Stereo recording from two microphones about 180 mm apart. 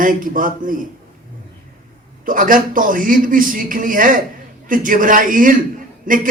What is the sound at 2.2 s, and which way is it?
A man's voice, 50° right (ahead or behind).